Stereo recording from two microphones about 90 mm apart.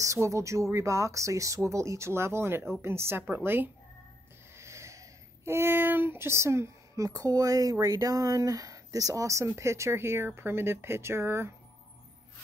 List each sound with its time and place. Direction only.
0.0 s a woman's voice: 35° right (ahead or behind)
4.6 s speech: 35° right (ahead or behind)